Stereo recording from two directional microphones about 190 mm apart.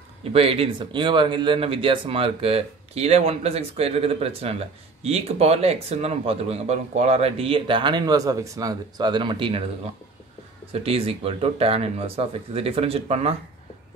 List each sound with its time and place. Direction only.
0.2 s speech: 30° right (ahead or behind)
10.7 s speech: 30° right (ahead or behind)